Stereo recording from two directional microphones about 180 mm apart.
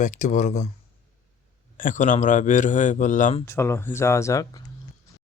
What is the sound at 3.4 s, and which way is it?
Speech, 15° left (ahead or behind).